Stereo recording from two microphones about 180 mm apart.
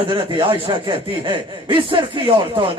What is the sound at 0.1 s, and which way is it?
Speech, 30° right (ahead or behind).